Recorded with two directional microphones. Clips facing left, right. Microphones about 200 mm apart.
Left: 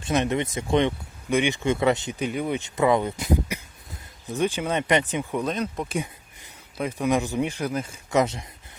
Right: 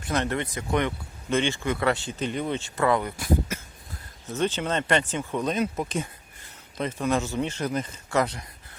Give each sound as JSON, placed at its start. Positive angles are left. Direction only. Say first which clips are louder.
{"t": 0.0, "sound": "speech", "louder": "left 3 dB", "side_deg": 20}
{"t": 5.5, "sound": "speech", "louder": "right 1 dB", "side_deg": -5}
{"t": 5.9, "sound": "speech", "louder": "left 1 dB", "side_deg": 15}
{"t": 8.1, "sound": "speech", "louder": "left 3 dB", "side_deg": 20}